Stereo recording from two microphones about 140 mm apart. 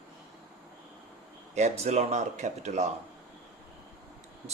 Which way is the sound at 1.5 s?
50° right (ahead or behind).